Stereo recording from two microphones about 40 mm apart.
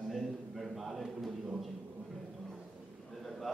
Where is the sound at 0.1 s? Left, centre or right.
Centre.